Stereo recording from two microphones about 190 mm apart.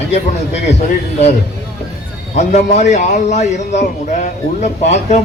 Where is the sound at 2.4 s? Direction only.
35° left (ahead or behind).